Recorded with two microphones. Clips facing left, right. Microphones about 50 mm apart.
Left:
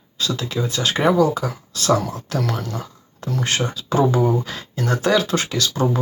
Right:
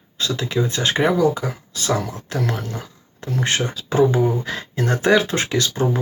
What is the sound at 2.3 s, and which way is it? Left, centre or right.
Speech, right.